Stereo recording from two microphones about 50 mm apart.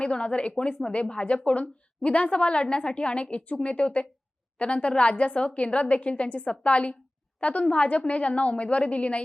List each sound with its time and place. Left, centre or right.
0.0 s a woman's voice: left